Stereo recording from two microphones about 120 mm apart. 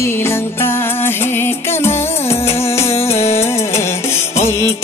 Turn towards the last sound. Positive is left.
turn(degrees=20)  # may be behind; listen again after turning